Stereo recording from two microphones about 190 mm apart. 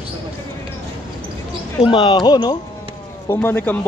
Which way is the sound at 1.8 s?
25° left (ahead or behind).